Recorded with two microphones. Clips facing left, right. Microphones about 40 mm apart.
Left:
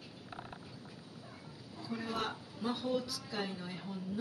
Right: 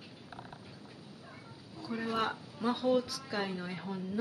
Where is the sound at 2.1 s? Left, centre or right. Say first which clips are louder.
Right 5 dB; right.